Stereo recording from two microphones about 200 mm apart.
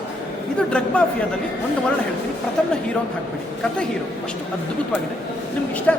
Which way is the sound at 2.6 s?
5° left (ahead or behind).